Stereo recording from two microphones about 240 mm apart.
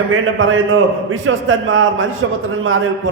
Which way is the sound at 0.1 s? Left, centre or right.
Right.